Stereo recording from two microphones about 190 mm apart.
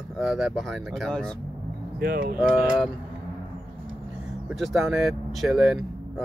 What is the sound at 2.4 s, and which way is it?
Speech, 5° right (ahead or behind).